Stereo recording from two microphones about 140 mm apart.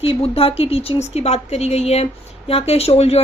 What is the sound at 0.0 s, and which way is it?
Speech, 45° left (ahead or behind).